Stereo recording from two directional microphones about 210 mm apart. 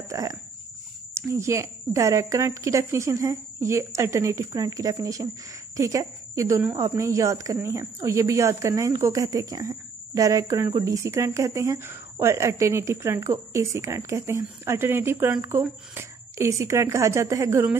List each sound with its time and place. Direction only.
0.1 s speech: 15° right (ahead or behind)